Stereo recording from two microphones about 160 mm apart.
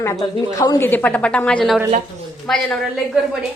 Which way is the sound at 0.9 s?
10° left (ahead or behind).